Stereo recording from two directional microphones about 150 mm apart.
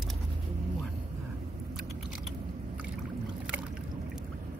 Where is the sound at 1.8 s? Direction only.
5° right (ahead or behind).